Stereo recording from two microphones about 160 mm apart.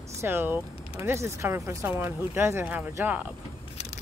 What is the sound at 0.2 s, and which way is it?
Speech, 15° right (ahead or behind).